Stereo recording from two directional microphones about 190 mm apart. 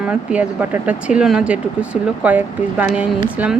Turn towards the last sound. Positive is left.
turn(degrees=-10)  # may be behind; listen again after turning